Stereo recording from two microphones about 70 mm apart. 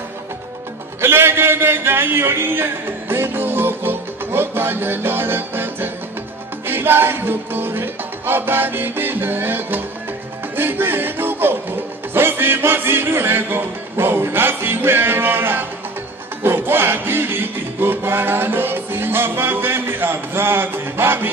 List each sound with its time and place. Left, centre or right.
1.0 s speech: right
6.7 s music: right